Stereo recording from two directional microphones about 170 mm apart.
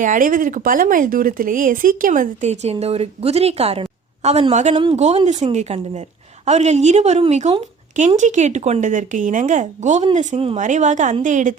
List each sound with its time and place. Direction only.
0.0 s a woman's voice: 50° right (ahead or behind)